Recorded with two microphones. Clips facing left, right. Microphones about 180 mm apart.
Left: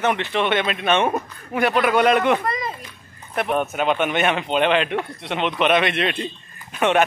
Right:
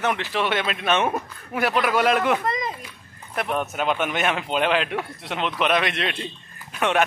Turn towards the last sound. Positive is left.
turn(degrees=0)  # may be behind; listen again after turning